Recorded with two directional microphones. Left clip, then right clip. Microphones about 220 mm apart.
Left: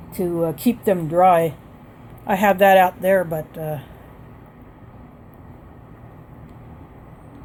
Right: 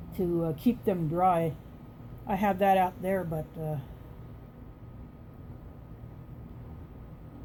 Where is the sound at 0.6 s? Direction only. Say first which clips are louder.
Left 9 dB; 30° left (ahead or behind).